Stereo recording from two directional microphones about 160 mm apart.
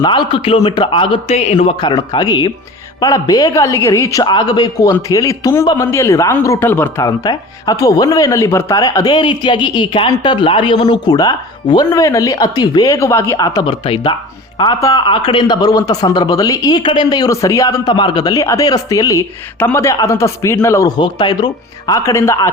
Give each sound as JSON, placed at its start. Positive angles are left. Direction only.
{"t": 0.0, "sound": "a man's voice", "side_deg": 30}
{"t": 14.6, "sound": "speech", "side_deg": 25}